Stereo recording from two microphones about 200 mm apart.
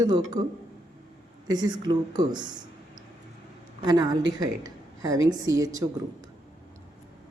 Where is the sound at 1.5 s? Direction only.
20° right (ahead or behind).